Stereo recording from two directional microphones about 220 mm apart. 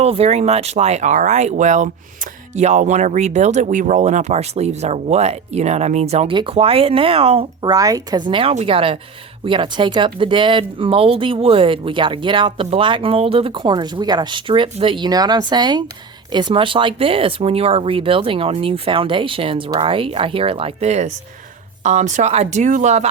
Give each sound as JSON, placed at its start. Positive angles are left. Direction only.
{"t": 0.0, "sound": "speech", "side_deg": -25}